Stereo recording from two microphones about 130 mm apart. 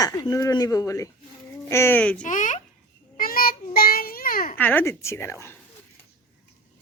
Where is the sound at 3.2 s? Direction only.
90° left.